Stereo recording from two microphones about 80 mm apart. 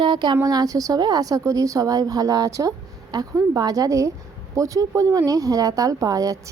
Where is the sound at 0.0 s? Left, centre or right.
Right.